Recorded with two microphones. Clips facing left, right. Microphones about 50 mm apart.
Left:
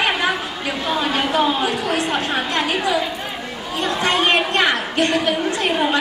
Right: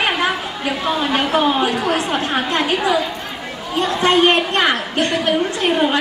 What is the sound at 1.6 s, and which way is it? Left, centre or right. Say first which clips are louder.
Speech: right 2 dB; right.